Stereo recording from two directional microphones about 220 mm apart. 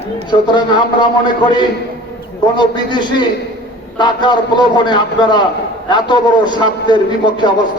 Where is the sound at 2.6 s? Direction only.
20° left (ahead or behind).